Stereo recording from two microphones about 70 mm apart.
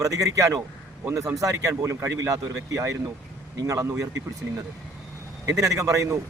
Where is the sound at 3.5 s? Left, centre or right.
Right.